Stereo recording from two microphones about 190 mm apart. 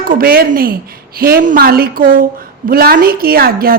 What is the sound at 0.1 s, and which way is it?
A woman's voice, 50° right (ahead or behind).